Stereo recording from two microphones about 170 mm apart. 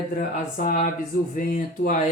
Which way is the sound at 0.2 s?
50° left (ahead or behind).